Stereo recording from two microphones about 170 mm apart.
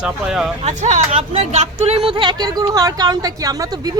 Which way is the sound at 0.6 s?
45° right (ahead or behind).